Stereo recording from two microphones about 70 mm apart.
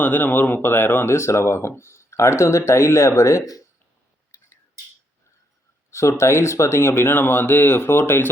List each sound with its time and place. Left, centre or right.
0.0 s speech: left
1.1 s speech: left
4.3 s a sound: left
5.9 s speech: left